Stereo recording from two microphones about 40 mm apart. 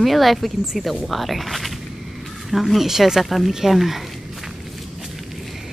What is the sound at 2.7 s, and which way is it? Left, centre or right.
Speech, centre.